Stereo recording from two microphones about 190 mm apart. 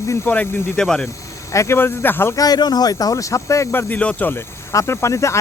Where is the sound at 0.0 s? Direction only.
15° left (ahead or behind).